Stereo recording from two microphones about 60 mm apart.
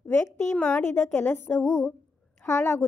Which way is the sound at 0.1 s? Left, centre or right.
Left.